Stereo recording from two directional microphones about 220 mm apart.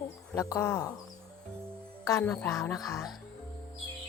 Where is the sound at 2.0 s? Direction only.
10° left (ahead or behind).